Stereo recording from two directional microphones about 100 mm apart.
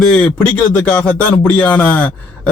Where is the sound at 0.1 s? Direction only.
10° left (ahead or behind).